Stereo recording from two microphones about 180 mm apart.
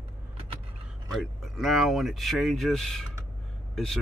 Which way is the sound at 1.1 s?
Centre (ahead or behind).